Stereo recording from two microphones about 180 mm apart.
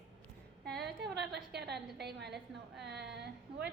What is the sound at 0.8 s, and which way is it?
A woman's voice, 70° right (ahead or behind).